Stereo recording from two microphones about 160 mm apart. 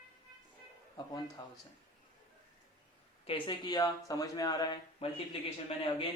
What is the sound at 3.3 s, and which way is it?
Speech, 30° left (ahead or behind).